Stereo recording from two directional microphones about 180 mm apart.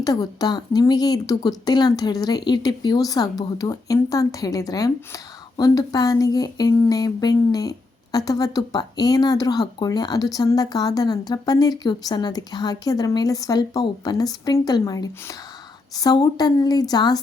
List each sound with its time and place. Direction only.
0.0 s speech: 20° left (ahead or behind)